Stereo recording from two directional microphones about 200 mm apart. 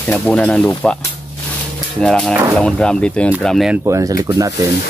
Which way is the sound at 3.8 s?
15° right (ahead or behind).